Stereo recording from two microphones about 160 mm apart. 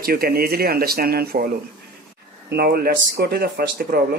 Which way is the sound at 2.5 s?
75° right (ahead or behind).